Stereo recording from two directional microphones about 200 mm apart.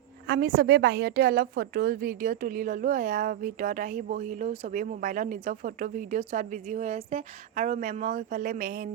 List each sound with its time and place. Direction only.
0.3 s a woman's voice: 55° right (ahead or behind)